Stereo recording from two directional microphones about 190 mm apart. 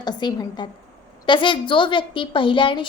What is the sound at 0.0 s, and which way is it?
A woman's voice, 20° left (ahead or behind).